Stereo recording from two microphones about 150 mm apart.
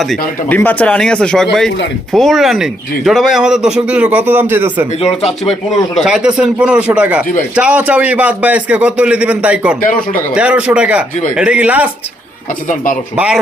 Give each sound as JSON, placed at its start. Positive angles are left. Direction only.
{"t": 0.0, "sound": "speech", "side_deg": 0}
{"t": 0.5, "sound": "speech", "side_deg": 10}
{"t": 5.9, "sound": "a man's voice", "side_deg": -5}
{"t": 12.6, "sound": "speech", "side_deg": 60}
{"t": 13.1, "sound": "a man's voice", "side_deg": -5}